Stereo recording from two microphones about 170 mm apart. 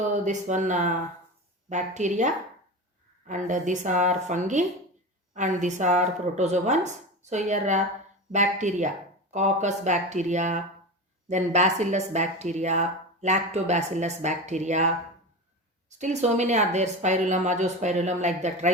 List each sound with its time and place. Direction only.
0.0 s speech: 45° right (ahead or behind)